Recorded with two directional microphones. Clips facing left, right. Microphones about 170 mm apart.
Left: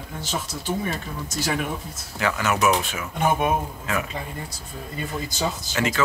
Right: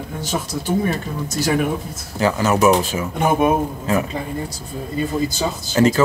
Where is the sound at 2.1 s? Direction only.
35° right (ahead or behind).